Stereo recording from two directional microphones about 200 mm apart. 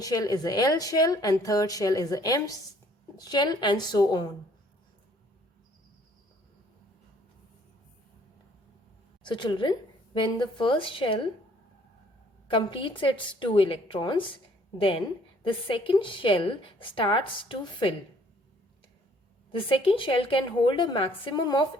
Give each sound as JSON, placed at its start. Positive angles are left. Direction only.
{"t": 0.0, "sound": "a woman's voice", "side_deg": 20}
{"t": 9.2, "sound": "a woman's voice", "side_deg": 25}
{"t": 12.5, "sound": "a woman's voice", "side_deg": 25}
{"t": 19.5, "sound": "a woman's voice", "side_deg": 25}